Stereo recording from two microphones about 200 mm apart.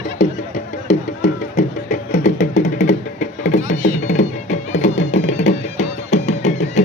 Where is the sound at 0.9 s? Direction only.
35° left (ahead or behind).